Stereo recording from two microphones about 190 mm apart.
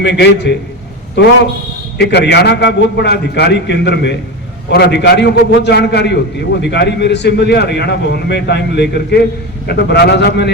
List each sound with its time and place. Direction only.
0.0 s a man's voice: 65° left (ahead or behind)